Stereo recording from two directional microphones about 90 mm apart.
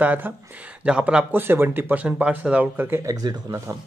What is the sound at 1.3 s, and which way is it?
Speech, 25° right (ahead or behind).